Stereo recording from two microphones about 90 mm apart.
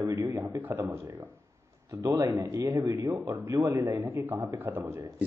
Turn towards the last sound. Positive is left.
turn(degrees=-20)  # may be behind; listen again after turning